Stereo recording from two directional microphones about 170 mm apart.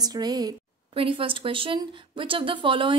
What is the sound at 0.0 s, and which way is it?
A woman's voice, 25° right (ahead or behind).